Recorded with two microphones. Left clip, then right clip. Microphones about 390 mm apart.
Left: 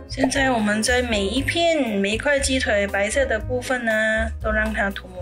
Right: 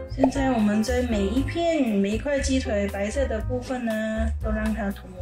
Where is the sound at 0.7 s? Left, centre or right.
Left.